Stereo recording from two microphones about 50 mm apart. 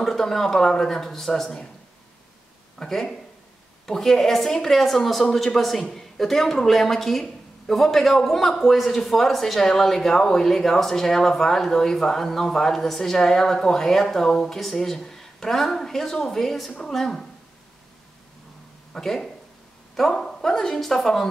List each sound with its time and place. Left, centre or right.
0.0 s a woman's voice: centre
2.8 s a woman's voice: centre
18.9 s a woman's voice: centre